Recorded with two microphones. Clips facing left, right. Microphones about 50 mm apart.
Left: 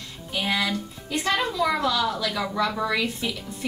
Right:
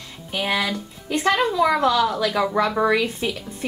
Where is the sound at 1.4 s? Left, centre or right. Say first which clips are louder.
Right 5 dB; right.